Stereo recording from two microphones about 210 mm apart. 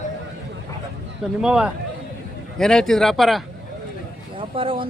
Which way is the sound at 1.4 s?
5° right (ahead or behind).